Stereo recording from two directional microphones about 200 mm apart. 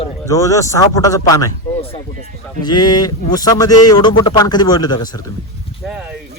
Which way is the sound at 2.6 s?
20° left (ahead or behind).